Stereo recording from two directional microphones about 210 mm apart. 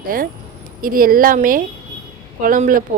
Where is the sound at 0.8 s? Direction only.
40° right (ahead or behind).